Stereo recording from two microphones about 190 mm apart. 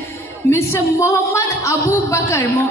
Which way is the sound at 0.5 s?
15° left (ahead or behind).